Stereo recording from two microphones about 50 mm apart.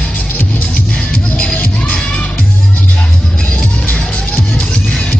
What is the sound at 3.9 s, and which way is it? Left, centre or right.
Music, left.